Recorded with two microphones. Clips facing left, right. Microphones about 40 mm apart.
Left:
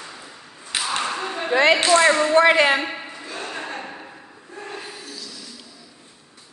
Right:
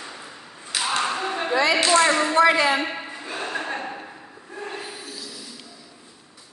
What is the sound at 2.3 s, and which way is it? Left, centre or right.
Speech, left.